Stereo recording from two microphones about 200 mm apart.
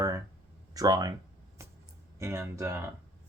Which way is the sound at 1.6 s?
15° right (ahead or behind).